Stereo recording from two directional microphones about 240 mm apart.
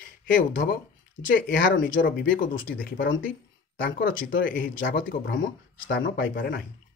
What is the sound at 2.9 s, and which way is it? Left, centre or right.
Speech, left.